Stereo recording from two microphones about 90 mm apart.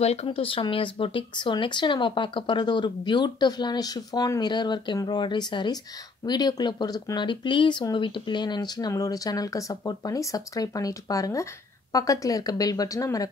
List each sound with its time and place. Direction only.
0.3 s speech: 85° left; by 7.0 s 50° left (ahead or behind)
7.2 s speech: 60° left (ahead or behind); by 13.3 s 40° left (ahead or behind)